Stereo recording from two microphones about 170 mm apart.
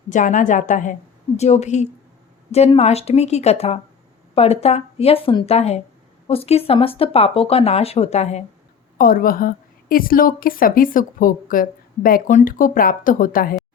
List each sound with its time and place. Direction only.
0.1 s a woman's voice: 50° left (ahead or behind)
9.0 s a woman's voice: 55° left (ahead or behind)